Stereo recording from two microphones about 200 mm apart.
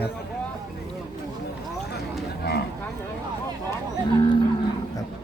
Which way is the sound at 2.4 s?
55° left (ahead or behind).